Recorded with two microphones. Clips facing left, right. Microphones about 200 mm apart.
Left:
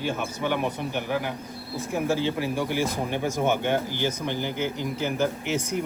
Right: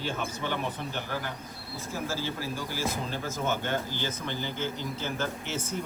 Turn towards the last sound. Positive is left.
turn(degrees=15)  # may be behind; listen again after turning